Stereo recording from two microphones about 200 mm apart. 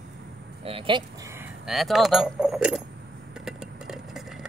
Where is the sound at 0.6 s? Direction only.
25° right (ahead or behind).